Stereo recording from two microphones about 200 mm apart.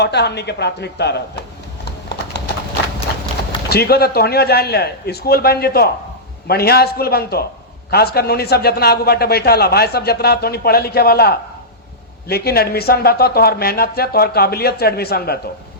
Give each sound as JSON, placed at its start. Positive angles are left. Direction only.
{"t": 0.0, "sound": "speech", "side_deg": 55}
{"t": 3.7, "sound": "a man's voice", "side_deg": 50}